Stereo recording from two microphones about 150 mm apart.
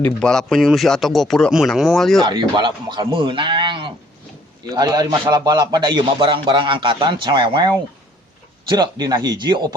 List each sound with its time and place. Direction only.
0.0 s speech: 5° left (ahead or behind)
2.2 s a man's voice: 30° right (ahead or behind)
8.7 s speech: 25° right (ahead or behind)